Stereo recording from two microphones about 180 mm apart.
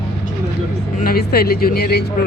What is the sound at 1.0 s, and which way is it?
Speech, 60° left (ahead or behind).